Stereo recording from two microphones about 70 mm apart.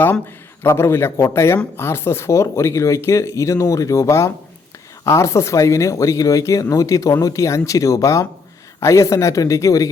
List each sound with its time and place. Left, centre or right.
0.7 s a man's voice: left